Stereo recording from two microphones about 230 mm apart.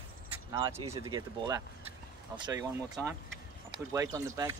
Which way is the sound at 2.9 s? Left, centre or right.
Centre.